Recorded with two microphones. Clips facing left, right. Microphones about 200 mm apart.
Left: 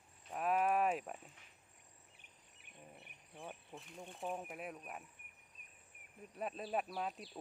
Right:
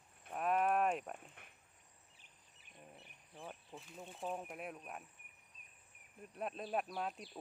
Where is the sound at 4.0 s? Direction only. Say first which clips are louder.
Even; 5° right (ahead or behind).